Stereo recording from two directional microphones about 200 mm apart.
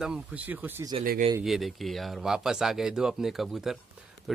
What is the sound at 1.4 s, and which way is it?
Speech, centre (ahead or behind).